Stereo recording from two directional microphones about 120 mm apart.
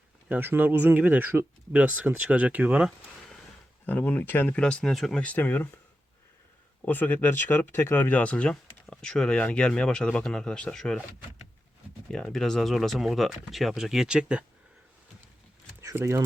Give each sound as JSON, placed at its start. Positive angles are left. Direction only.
{"t": 0.3, "sound": "speech", "side_deg": -15}
{"t": 3.8, "sound": "speech", "side_deg": 15}
{"t": 6.8, "sound": "speech", "side_deg": 15}
{"t": 12.1, "sound": "speech", "side_deg": 5}
{"t": 15.8, "sound": "speech", "side_deg": -25}